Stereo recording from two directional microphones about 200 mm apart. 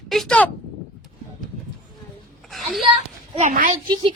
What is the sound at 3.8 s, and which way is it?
Speech, 25° right (ahead or behind).